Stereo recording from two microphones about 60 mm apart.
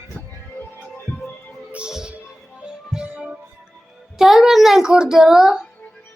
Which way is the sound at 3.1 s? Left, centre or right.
Right.